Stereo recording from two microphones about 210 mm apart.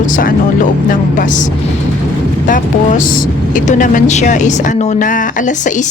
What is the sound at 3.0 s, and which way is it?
A woman's voice, 40° left (ahead or behind).